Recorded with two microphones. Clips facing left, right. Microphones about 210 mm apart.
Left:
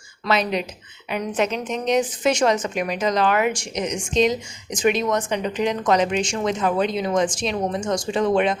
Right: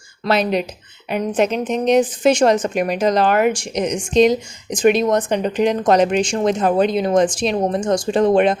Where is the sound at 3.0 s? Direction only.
35° right (ahead or behind).